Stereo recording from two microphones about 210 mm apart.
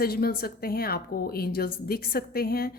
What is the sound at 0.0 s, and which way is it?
A woman's voice, 45° left (ahead or behind).